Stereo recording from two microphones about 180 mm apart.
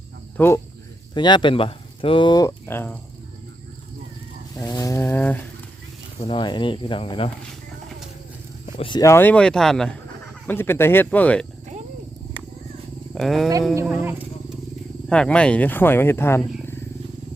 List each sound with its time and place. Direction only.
0.3 s speech: 15° left (ahead or behind)
1.1 s speech: 25° left (ahead or behind)
4.7 s speech: 20° left (ahead or behind)
6.2 s speech: 25° left (ahead or behind)
8.8 s speech: 25° left (ahead or behind)
13.1 s speech: centre (ahead or behind)
13.9 s speech: 10° right (ahead or behind)
15.1 s speech: 5° left (ahead or behind)
16.4 s speech: centre (ahead or behind)